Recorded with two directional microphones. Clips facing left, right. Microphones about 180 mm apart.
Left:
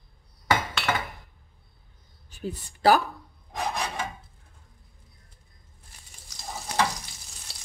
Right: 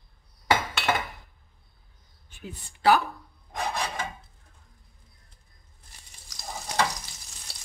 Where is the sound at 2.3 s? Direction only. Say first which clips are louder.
Left 8 dB; 40° left (ahead or behind).